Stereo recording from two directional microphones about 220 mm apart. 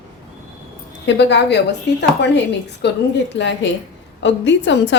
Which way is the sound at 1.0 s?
50° left (ahead or behind).